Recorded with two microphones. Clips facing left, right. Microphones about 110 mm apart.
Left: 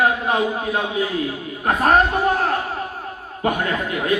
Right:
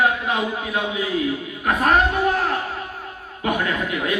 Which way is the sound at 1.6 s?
35° left (ahead or behind).